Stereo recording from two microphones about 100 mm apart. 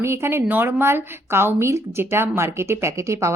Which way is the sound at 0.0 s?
25° right (ahead or behind).